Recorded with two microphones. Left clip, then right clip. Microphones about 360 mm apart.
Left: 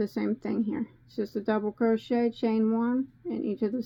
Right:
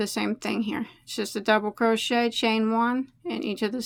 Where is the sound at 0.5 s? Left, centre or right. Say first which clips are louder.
Right 2 dB; right.